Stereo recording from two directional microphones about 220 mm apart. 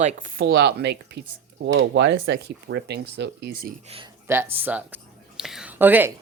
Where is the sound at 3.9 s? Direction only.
25° right (ahead or behind).